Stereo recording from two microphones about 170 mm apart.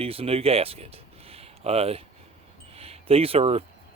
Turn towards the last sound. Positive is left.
turn(degrees=-35)  # may be behind; listen again after turning